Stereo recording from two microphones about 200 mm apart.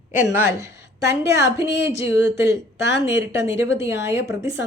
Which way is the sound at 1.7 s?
60° left (ahead or behind).